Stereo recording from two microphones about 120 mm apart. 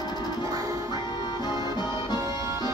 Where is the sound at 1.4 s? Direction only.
35° left (ahead or behind).